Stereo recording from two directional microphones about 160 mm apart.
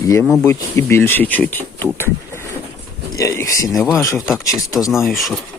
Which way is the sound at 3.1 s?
20° left (ahead or behind).